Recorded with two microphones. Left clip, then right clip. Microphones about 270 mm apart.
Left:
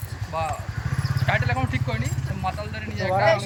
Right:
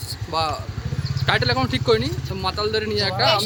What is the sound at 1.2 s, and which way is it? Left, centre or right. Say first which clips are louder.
Speech: right 5 dB; centre.